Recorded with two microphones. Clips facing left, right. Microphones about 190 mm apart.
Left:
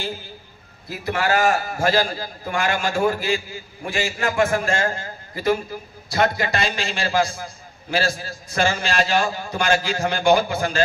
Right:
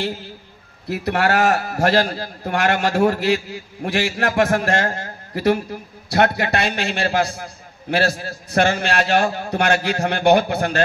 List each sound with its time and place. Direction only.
0.8 s a man's voice: 65° right (ahead or behind)